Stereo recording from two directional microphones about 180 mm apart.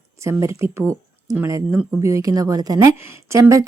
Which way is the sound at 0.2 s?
15° right (ahead or behind).